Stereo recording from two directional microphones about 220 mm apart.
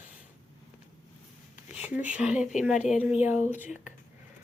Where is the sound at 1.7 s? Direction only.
5° right (ahead or behind).